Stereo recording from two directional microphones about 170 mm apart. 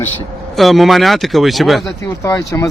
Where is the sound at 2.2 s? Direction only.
20° left (ahead or behind).